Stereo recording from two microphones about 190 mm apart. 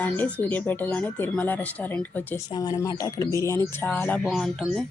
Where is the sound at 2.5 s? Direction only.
20° left (ahead or behind).